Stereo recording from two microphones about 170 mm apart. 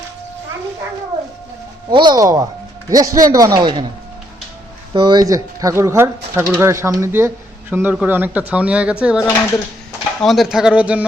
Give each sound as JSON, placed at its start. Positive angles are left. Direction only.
{"t": 1.9, "sound": "a man's voice", "side_deg": -25}
{"t": 4.9, "sound": "speech", "side_deg": -25}